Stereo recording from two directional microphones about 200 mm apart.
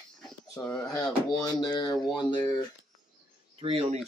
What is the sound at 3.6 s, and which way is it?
Speech, 25° right (ahead or behind).